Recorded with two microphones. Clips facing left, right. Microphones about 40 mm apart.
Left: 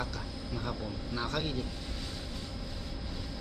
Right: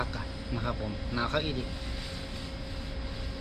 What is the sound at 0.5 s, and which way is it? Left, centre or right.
Speech, right.